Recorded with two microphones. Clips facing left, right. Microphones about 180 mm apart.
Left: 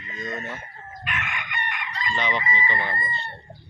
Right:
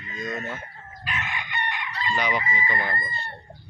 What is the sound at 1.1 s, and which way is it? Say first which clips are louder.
Chicken: right 1 dB; 35° right (ahead or behind).